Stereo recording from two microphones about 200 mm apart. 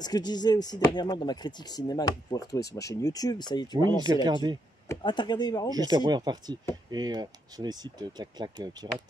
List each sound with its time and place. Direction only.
0.0 s speech: 20° left (ahead or behind)
3.7 s speech: 20° right (ahead or behind)
4.8 s speech: 25° left (ahead or behind)
5.7 s speech: 20° right (ahead or behind)